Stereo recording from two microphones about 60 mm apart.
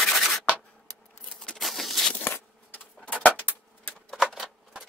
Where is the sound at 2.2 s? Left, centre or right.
Left.